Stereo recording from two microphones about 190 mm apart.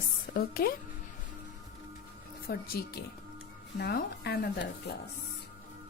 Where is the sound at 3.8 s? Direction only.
55° left (ahead or behind).